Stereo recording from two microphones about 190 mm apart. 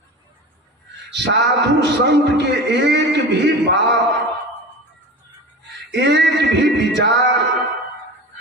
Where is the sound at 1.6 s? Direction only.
65° right (ahead or behind).